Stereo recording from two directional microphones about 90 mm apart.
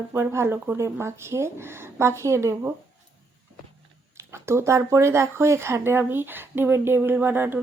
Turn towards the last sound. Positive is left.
turn(degrees=-25)  # may be behind; listen again after turning